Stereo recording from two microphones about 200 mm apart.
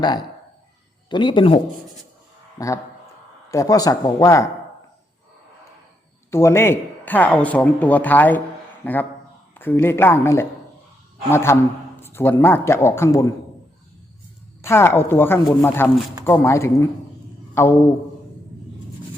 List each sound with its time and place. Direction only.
1.1 s speech: 25° left (ahead or behind)
6.3 s speech: 10° left (ahead or behind)
14.6 s speech: 10° left (ahead or behind)
17.5 s a sound: 10° left (ahead or behind)